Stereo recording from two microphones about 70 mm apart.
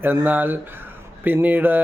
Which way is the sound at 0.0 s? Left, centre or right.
Right.